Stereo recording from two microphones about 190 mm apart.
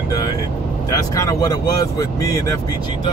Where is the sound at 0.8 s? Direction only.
20° left (ahead or behind).